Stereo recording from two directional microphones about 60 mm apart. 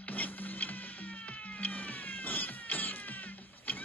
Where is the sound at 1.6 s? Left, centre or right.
Left.